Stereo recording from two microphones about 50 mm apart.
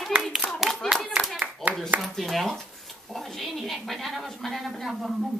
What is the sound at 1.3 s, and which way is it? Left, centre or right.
Clapping, right.